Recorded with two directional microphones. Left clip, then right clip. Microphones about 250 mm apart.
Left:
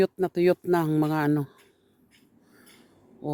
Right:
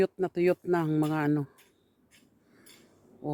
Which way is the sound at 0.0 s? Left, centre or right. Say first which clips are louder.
Left 4 dB; centre.